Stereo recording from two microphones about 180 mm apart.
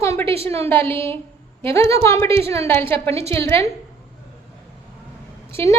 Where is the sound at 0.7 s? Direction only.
10° left (ahead or behind).